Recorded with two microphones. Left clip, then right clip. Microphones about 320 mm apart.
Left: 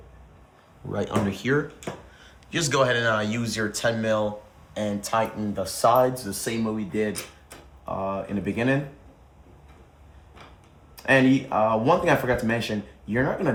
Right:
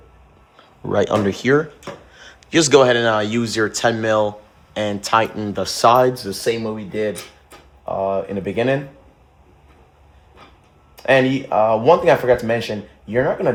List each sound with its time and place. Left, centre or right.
0.9 s speech: centre
10.9 s speech: right